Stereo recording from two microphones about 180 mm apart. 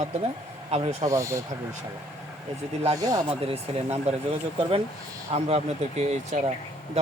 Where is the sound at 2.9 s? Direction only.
20° right (ahead or behind).